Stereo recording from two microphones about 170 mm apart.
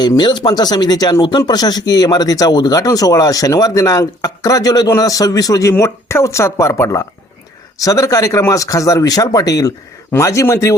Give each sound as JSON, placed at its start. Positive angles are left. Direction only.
{"t": 0.0, "sound": "speech", "side_deg": 25}